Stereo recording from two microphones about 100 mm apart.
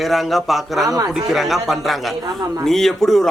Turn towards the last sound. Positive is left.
turn(degrees=5)  # may be behind; listen again after turning